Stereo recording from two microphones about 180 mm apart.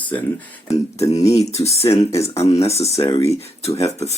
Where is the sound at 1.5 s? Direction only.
35° left (ahead or behind).